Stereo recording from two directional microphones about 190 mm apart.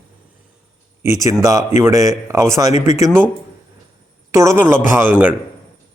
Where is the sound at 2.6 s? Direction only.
35° left (ahead or behind).